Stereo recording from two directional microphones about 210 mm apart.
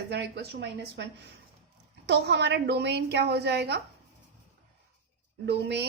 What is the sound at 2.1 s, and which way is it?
A woman's voice, 55° right (ahead or behind).